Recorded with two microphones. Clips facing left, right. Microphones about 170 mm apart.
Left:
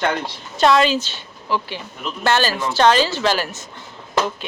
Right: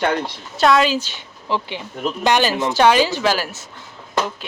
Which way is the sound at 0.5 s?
Centre (ahead or behind).